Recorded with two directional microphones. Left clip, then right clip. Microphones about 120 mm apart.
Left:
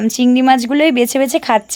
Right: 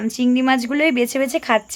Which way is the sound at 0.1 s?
45° left (ahead or behind).